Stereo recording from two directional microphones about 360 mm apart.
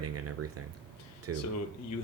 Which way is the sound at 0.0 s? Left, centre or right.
Right.